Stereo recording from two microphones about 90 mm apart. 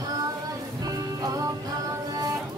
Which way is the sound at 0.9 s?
40° right (ahead or behind).